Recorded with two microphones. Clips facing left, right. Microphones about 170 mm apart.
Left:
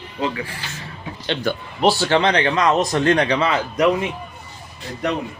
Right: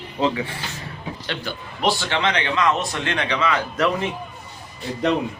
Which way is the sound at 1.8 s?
40° left (ahead or behind).